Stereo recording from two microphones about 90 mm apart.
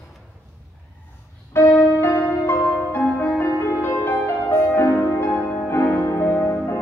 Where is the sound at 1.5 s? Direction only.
25° left (ahead or behind).